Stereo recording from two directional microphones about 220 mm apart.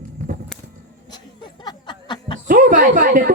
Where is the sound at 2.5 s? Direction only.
35° right (ahead or behind).